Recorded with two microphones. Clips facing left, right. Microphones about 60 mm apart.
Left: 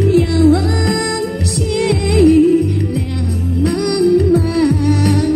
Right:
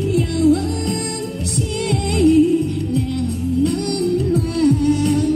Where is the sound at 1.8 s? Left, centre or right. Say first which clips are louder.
Left 4 dB; left.